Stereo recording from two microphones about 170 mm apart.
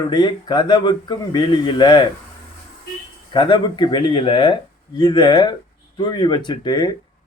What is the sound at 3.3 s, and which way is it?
Speech, 25° left (ahead or behind).